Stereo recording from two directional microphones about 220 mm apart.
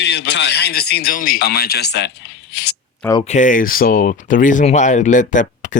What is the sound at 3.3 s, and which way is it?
Speech, 35° left (ahead or behind).